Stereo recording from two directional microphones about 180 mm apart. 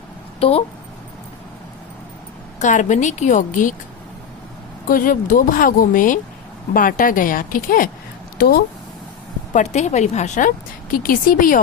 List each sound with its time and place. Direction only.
0.3 s speech: 35° left (ahead or behind)
2.6 s speech: 45° left (ahead or behind)
4.9 s speech: 50° left (ahead or behind)
9.5 s a woman's voice: 40° left (ahead or behind)
10.9 s speech: 50° left (ahead or behind)